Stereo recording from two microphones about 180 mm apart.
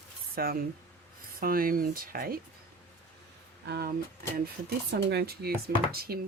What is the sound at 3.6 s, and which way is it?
Speech, 65° right (ahead or behind).